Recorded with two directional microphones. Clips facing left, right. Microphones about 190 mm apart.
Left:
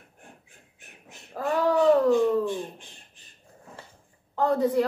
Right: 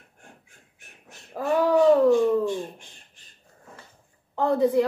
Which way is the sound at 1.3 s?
15° right (ahead or behind).